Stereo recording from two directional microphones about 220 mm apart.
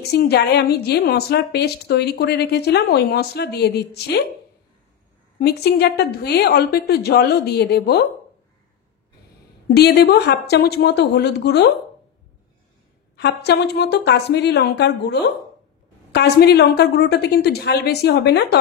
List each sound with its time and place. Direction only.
0.0 s a woman's voice: 45° left (ahead or behind)
5.4 s a woman's voice: 45° left (ahead or behind)
9.8 s a woman's voice: 45° left (ahead or behind)
13.1 s a woman's voice: 50° left (ahead or behind)